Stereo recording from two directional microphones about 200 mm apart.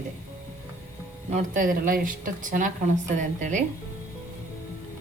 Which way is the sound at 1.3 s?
40° right (ahead or behind).